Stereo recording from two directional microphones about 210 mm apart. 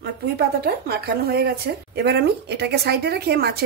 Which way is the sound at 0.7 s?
50° right (ahead or behind).